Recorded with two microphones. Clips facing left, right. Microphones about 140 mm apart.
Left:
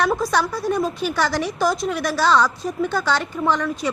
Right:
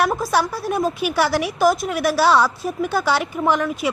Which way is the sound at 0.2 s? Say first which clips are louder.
Even; 5° right (ahead or behind).